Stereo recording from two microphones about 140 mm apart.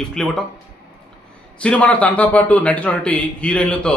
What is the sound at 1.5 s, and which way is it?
A man's voice, 10° left (ahead or behind).